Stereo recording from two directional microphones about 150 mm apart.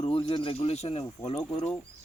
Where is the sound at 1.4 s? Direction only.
10° left (ahead or behind).